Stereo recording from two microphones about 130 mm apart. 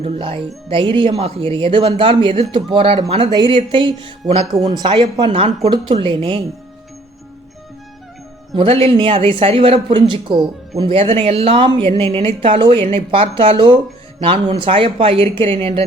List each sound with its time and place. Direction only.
0.0 s speech: 40° right (ahead or behind)
8.5 s speech: 45° right (ahead or behind)